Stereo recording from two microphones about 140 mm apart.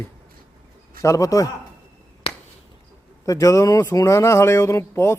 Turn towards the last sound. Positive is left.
turn(degrees=20)  # may be behind; listen again after turning